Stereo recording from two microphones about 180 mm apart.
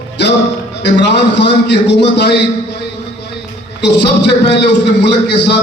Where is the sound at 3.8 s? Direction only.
70° left (ahead or behind).